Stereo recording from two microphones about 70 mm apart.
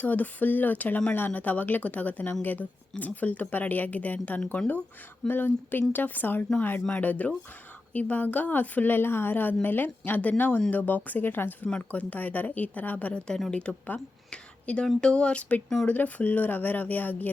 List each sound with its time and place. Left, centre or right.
0.0 s a woman's voice: left